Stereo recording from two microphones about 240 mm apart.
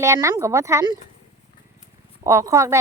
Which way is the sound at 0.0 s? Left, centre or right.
Centre.